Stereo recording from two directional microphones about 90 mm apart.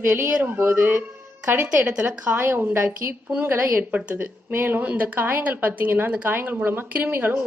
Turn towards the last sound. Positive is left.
turn(degrees=-25)  # may be behind; listen again after turning